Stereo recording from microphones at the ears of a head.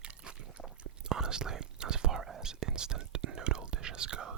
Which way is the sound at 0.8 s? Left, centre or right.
Right.